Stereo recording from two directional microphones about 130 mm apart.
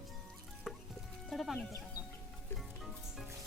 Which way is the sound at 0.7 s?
5° left (ahead or behind).